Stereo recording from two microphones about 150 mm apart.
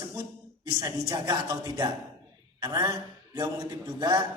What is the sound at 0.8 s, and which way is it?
A woman's voice, 25° right (ahead or behind).